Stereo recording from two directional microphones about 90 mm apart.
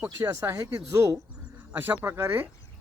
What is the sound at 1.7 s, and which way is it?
Speech, 25° right (ahead or behind).